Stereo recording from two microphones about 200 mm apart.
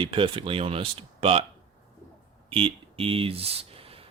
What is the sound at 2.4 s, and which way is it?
Speech, 30° right (ahead or behind).